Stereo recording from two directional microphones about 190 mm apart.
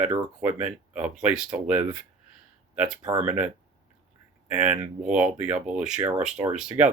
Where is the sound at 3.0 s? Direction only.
10° right (ahead or behind).